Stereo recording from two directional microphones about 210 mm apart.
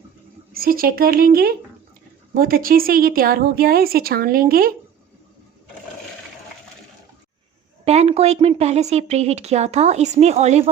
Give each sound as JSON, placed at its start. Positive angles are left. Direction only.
{"t": 0.5, "sound": "a woman's voice", "side_deg": -45}
{"t": 7.9, "sound": "a woman's voice", "side_deg": -30}